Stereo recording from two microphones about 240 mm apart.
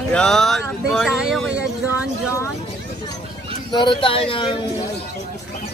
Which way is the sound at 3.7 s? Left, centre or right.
Centre.